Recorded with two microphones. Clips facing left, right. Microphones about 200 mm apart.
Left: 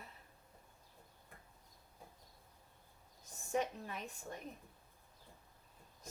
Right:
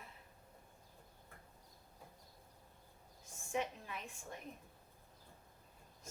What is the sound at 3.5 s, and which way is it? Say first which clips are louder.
Speech: left 3 dB; 40° left (ahead or behind).